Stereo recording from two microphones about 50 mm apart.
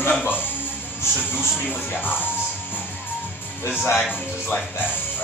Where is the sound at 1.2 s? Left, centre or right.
Left.